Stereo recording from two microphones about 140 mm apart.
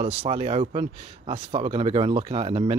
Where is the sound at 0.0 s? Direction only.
45° right (ahead or behind).